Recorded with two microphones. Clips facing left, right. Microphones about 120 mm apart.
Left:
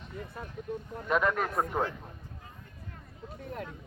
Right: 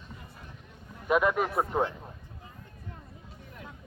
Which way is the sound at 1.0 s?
10° right (ahead or behind).